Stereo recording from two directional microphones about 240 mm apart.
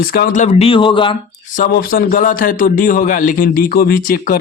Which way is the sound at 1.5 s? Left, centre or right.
Left.